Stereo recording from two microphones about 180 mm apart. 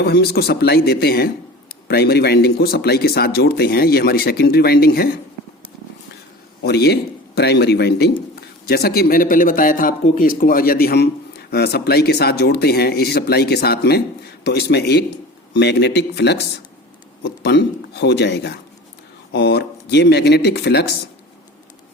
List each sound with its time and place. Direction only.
0.0 s a man's voice: 65° left (ahead or behind)
6.6 s a man's voice: 65° left (ahead or behind)